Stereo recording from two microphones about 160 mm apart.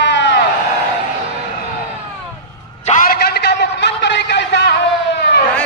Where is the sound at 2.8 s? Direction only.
55° left (ahead or behind); by 5.4 s 90° left.